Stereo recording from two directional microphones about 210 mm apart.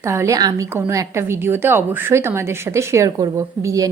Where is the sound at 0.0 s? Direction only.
15° right (ahead or behind).